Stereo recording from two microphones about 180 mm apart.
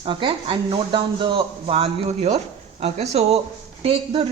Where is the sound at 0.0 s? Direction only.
30° right (ahead or behind).